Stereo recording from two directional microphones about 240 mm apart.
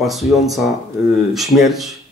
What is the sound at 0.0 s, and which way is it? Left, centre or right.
Speech, centre.